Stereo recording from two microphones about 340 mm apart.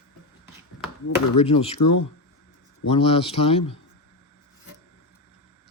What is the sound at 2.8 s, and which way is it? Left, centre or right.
Speech, centre.